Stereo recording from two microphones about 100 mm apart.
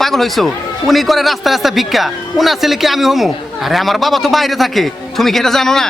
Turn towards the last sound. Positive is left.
turn(degrees=5)  # may be behind; listen again after turning